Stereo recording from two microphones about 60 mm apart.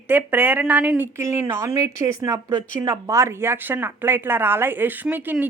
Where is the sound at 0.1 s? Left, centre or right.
Right.